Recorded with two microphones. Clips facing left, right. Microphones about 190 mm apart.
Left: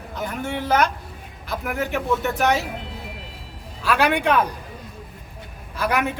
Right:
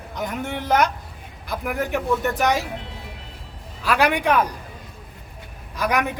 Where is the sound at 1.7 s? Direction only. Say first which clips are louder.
Even; 15° right (ahead or behind).